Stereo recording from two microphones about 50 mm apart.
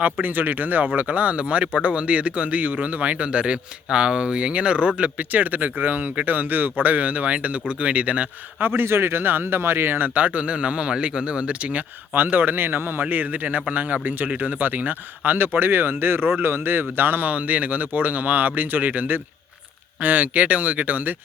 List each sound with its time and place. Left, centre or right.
0.0 s speech: right
8.6 s a man's voice: right
12.1 s a man's voice: right